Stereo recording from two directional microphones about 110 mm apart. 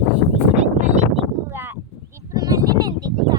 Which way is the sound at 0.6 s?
90° right.